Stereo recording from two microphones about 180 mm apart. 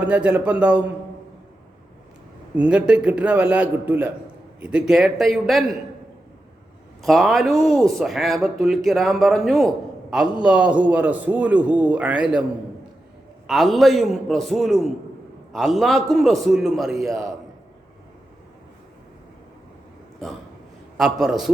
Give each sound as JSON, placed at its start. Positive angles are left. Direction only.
{"t": 0.0, "sound": "a man's voice", "side_deg": -10}
{"t": 2.6, "sound": "a man's voice", "side_deg": -5}
{"t": 7.0, "sound": "speech", "side_deg": 0}
{"t": 13.5, "sound": "speech", "side_deg": 0}
{"t": 21.0, "sound": "speech", "side_deg": 0}